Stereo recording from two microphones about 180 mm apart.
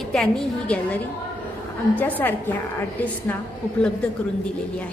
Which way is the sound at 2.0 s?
10° left (ahead or behind).